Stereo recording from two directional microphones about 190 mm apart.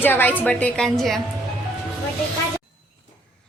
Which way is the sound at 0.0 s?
10° left (ahead or behind).